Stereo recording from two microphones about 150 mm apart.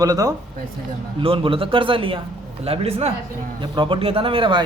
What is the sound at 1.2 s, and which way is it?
Speech, 35° right (ahead or behind).